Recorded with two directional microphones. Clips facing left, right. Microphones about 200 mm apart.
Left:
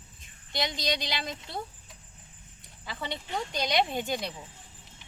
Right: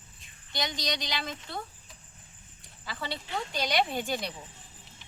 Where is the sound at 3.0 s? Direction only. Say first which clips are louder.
Left 1 dB; 20° left (ahead or behind).